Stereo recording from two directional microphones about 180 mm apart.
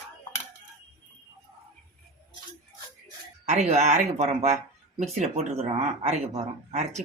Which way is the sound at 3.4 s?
40° right (ahead or behind).